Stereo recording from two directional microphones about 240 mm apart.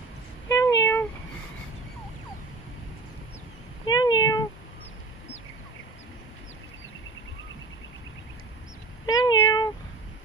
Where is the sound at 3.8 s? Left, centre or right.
Centre.